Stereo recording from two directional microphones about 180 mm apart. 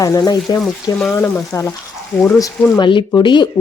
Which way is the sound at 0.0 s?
20° left (ahead or behind).